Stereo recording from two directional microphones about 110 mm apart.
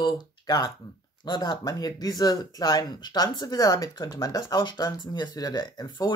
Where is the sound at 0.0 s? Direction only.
40° left (ahead or behind).